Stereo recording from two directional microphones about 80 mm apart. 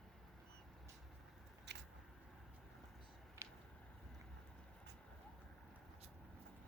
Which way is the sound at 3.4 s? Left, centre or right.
Right.